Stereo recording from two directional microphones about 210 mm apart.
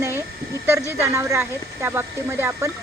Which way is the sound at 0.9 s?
10° right (ahead or behind).